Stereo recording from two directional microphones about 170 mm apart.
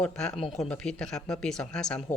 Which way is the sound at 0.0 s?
5° left (ahead or behind).